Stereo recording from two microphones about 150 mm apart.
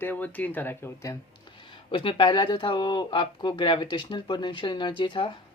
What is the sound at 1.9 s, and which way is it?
Speech, 35° left (ahead or behind).